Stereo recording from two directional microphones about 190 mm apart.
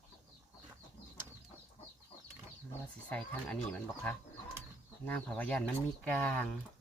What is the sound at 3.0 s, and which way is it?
Speech, 5° left (ahead or behind).